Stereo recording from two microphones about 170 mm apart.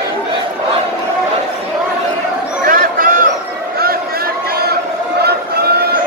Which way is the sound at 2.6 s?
55° right (ahead or behind).